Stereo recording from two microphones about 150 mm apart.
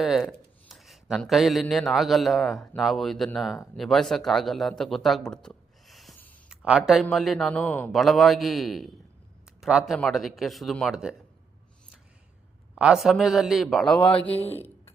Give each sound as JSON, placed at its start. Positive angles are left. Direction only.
{"t": 0.0, "sound": "a man's voice", "side_deg": 0}
{"t": 7.9, "sound": "a man's voice", "side_deg": 0}
{"t": 12.7, "sound": "a man's voice", "side_deg": 0}